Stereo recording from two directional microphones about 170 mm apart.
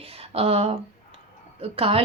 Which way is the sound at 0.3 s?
35° right (ahead or behind).